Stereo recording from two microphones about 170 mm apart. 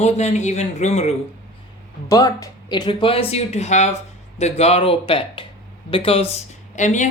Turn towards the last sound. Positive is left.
turn(degrees=45)  # may be behind; listen again after turning